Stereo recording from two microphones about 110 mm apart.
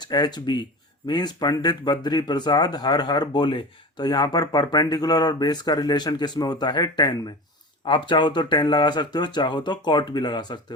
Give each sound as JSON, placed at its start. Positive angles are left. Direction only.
{"t": 0.0, "sound": "speech", "side_deg": 40}